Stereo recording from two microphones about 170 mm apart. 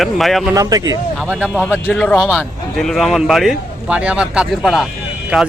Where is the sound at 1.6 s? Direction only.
10° left (ahead or behind).